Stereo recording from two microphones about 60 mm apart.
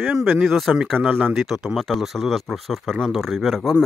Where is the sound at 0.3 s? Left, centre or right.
Centre.